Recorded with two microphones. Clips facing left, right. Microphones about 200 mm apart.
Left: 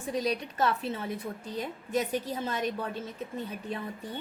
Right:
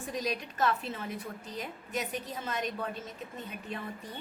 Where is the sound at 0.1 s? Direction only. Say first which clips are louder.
Left 5 dB; 30° left (ahead or behind).